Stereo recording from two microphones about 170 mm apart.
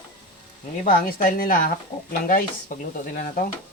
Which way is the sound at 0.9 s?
60° left (ahead or behind).